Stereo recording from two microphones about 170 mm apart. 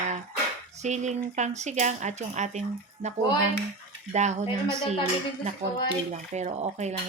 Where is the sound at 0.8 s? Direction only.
45° right (ahead or behind).